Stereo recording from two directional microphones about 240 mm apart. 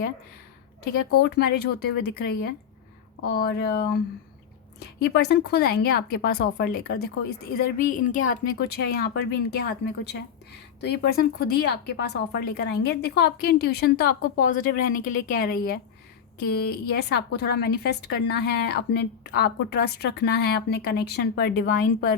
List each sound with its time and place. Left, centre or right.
1.2 s a woman's voice: left
4.8 s a woman's voice: left